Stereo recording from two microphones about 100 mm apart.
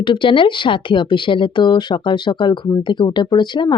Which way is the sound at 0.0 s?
55° left (ahead or behind).